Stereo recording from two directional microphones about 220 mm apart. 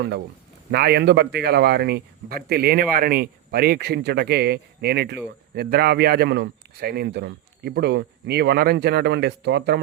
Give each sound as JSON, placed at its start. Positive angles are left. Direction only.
{"t": 0.7, "sound": "a man's voice", "side_deg": -45}